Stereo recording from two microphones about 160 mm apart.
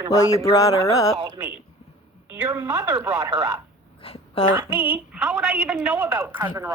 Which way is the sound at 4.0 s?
40° left (ahead or behind).